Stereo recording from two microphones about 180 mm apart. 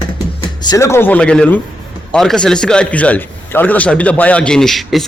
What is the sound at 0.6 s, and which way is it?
A man's voice, 15° left (ahead or behind).